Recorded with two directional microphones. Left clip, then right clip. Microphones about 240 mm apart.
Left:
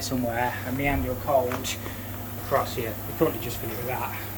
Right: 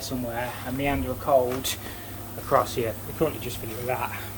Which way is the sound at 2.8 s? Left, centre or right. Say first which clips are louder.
Right 4 dB; centre.